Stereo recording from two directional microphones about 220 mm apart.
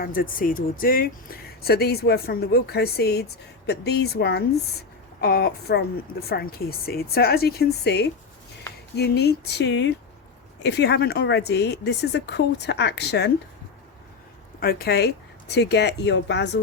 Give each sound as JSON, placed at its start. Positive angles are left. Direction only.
{"t": 0.0, "sound": "speech", "side_deg": 40}
{"t": 14.6, "sound": "speech", "side_deg": 45}